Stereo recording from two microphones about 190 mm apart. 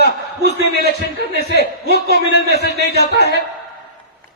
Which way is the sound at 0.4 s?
55° right (ahead or behind).